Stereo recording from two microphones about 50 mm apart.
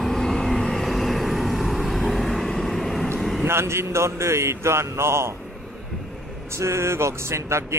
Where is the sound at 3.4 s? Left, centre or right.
Right.